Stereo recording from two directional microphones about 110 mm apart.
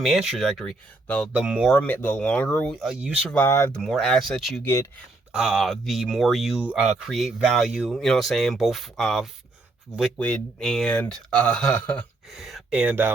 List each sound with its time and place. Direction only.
0.0 s speech: 5° right (ahead or behind)
1.3 s speech: 10° right (ahead or behind)
1.6 s speech: 10° left (ahead or behind)
2.8 s speech: 10° right (ahead or behind)
3.4 s speech: 25° left (ahead or behind)
3.8 s speech: centre (ahead or behind)
4.6 s speech: 25° left (ahead or behind)
5.3 s speech: 5° right (ahead or behind)
12.3 s speech: centre (ahead or behind)